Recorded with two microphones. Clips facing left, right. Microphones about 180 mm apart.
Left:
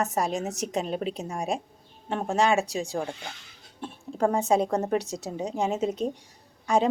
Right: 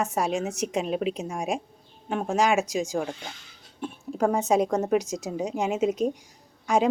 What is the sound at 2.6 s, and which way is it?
Speech, 35° left (ahead or behind).